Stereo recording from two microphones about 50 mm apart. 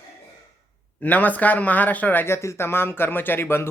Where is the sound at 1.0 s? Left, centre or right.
Left.